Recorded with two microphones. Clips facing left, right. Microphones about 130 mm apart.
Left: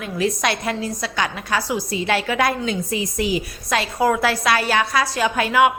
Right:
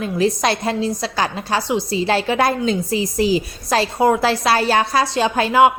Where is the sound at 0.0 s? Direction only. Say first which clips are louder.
Right 4 dB; 30° right (ahead or behind).